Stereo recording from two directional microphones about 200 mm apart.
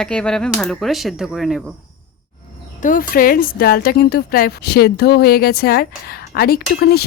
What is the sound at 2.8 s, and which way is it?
A woman's voice, 45° left (ahead or behind).